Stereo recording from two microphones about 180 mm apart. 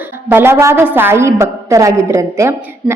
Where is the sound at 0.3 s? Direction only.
10° right (ahead or behind).